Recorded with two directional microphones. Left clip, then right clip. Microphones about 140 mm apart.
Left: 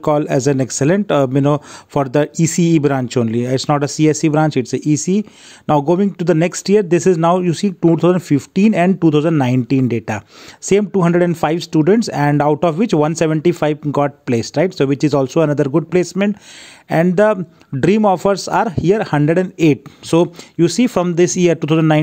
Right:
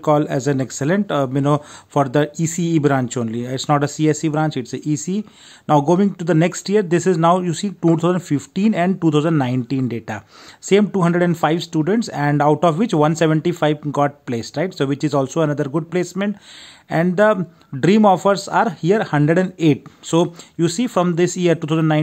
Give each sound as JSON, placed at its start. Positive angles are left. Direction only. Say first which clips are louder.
{"t": 0.0, "sound": "speech", "louder": "left 2 dB", "side_deg": 40}
{"t": 2.0, "sound": "speech", "louder": "left 3 dB", "side_deg": 45}